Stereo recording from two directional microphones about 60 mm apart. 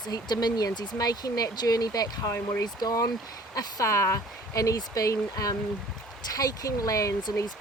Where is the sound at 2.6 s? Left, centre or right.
Left.